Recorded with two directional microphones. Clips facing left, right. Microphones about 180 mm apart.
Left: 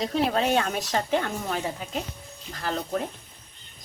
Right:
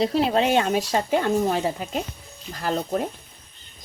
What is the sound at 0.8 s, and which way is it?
Speech, 30° right (ahead or behind).